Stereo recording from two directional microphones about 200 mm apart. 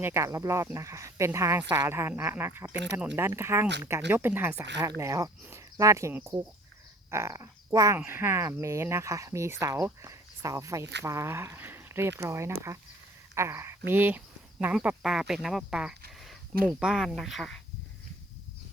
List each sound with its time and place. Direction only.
0.0 s speech: 15° right (ahead or behind)
2.7 s speech: 60° right (ahead or behind)
3.2 s speech: 15° right (ahead or behind)